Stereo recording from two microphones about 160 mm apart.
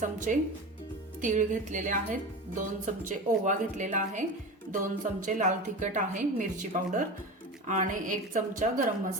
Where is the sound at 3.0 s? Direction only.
50° right (ahead or behind).